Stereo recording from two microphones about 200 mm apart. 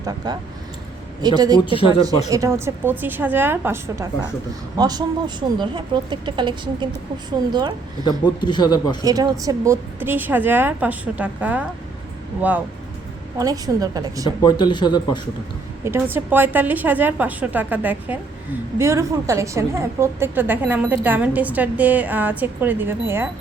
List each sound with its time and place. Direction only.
0.2 s speech: 20° right (ahead or behind)
1.6 s a man's voice: 25° left (ahead or behind)
2.3 s a woman's voice: 15° right (ahead or behind)
8.0 s a man's voice: 20° left (ahead or behind)
9.0 s a woman's voice: 20° right (ahead or behind)
13.4 s speech: 20° right (ahead or behind)
14.4 s a man's voice: 20° left (ahead or behind)
16.1 s a woman's voice: 10° right (ahead or behind)